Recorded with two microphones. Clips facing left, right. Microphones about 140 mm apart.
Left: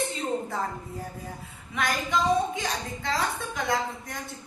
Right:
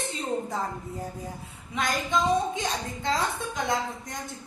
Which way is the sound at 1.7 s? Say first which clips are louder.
Even; 20° right (ahead or behind).